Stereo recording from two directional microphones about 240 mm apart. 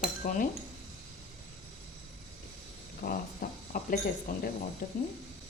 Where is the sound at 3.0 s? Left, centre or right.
Left.